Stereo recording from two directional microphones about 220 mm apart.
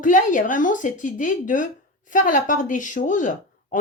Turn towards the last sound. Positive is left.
turn(degrees=35)  # may be behind; listen again after turning